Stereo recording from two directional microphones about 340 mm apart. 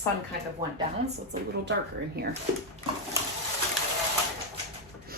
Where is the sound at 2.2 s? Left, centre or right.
Right.